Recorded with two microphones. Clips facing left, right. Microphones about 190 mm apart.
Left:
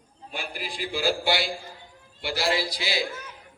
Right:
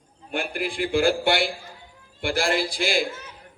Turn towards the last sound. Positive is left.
turn(degrees=-50)  # may be behind; listen again after turning